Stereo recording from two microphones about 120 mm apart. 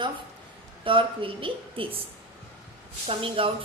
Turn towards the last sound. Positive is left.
turn(degrees=-50)  # may be behind; listen again after turning